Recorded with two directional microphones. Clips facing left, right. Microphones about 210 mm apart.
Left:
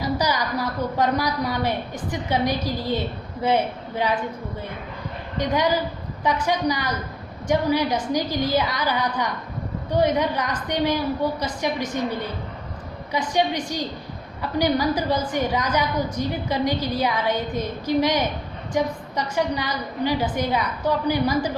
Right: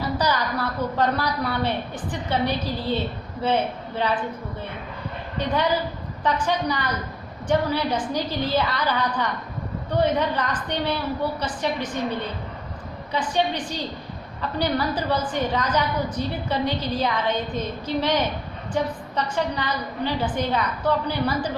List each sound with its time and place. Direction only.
0.0 s a woman's voice: 10° left (ahead or behind)
5.4 s a woman's voice: 10° left (ahead or behind)
13.3 s a woman's voice: 10° left (ahead or behind)